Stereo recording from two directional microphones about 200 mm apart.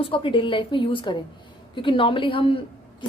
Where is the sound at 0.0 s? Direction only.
25° left (ahead or behind).